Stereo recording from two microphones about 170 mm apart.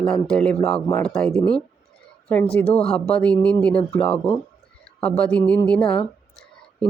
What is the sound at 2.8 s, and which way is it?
A woman's voice, 5° left (ahead or behind).